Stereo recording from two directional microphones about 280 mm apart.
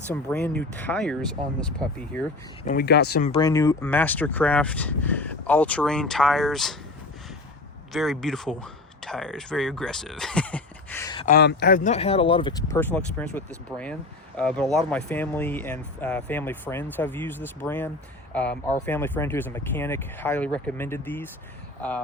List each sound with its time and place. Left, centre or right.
0.1 s speech: centre
2.6 s speech: left; by 6.7 s centre
7.9 s speech: centre
11.3 s speech: left; by 22.0 s centre